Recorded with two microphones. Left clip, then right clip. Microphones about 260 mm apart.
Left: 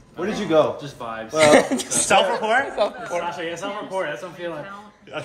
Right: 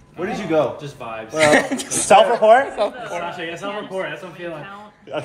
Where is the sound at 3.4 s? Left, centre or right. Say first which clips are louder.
Right 1 dB; left.